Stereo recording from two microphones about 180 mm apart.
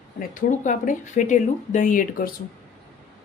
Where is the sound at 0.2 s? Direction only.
45° left (ahead or behind).